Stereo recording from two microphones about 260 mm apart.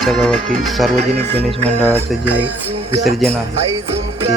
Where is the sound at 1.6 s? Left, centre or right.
Centre.